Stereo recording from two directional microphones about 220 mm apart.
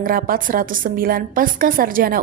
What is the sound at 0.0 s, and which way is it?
A woman's voice, 40° right (ahead or behind).